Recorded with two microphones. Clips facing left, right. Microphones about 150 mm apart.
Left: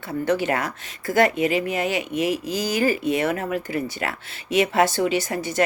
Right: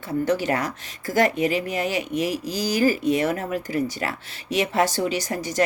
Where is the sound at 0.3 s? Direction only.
40° right (ahead or behind).